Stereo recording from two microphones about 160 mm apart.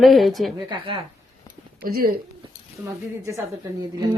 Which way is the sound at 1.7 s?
65° right (ahead or behind).